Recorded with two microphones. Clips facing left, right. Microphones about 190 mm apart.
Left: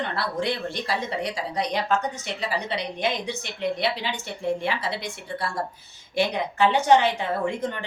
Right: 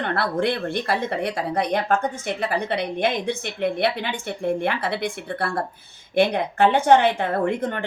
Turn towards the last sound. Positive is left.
turn(degrees=-55)  # may be behind; listen again after turning